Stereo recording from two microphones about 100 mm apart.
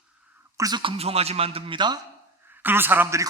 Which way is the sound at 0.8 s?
75° right (ahead or behind).